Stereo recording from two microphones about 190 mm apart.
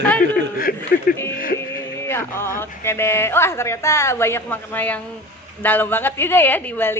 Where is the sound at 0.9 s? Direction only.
50° left (ahead or behind).